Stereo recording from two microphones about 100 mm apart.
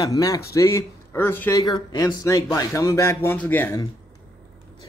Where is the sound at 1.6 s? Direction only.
45° left (ahead or behind).